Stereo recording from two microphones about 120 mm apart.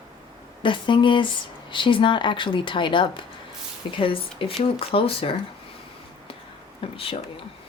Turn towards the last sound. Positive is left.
turn(degrees=50)  # may be behind; listen again after turning